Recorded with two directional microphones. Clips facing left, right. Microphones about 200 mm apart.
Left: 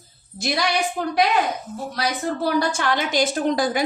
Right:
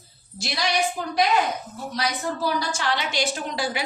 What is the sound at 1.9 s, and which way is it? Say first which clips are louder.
A woman's voice: left 2 dB; 60° left (ahead or behind).